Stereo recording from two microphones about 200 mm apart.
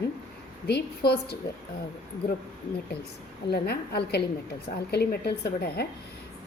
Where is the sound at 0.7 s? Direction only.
55° left (ahead or behind).